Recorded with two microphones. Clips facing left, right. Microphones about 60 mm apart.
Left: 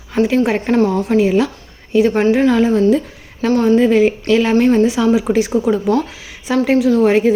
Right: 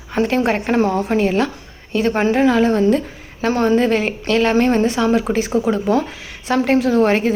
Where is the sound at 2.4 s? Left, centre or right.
Centre.